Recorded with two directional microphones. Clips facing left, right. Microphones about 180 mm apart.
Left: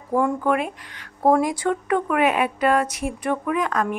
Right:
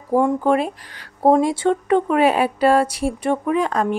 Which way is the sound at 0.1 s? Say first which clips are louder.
Right 4 dB; 25° right (ahead or behind).